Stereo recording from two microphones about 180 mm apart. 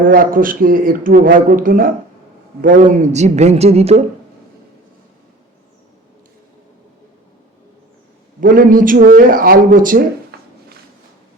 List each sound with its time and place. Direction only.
0.0 s a man's voice: 50° right (ahead or behind)
8.4 s a man's voice: 50° right (ahead or behind)
10.3 s a sound: 60° right (ahead or behind)